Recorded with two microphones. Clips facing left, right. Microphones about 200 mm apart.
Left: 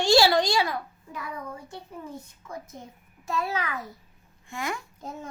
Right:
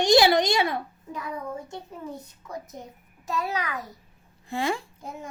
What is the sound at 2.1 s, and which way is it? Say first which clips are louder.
Speech: right 1 dB; 40° right (ahead or behind).